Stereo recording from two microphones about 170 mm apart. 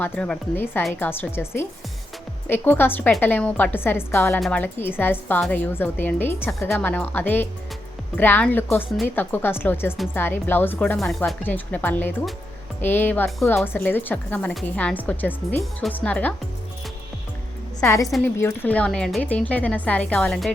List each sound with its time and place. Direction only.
0.0 s a woman's voice: 10° left (ahead or behind)
4.4 s a woman's voice: centre (ahead or behind)
4.6 s a woman's voice: 10° left (ahead or behind)
17.8 s a woman's voice: 20° left (ahead or behind)